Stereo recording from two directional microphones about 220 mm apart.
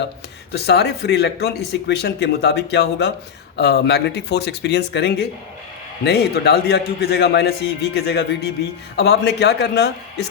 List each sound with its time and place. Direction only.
0.5 s speech: 50° left (ahead or behind)